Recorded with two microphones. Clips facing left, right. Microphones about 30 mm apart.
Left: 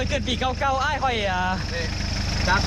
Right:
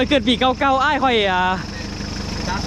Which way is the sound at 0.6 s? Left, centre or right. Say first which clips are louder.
Right 6 dB; right.